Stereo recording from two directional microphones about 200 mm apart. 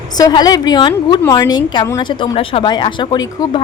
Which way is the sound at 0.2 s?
20° left (ahead or behind).